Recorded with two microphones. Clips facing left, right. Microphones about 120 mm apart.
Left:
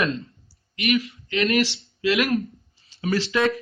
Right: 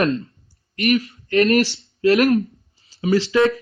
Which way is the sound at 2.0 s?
40° right (ahead or behind).